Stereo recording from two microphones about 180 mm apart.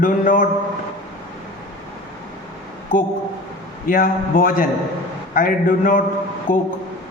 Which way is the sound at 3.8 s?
50° left (ahead or behind).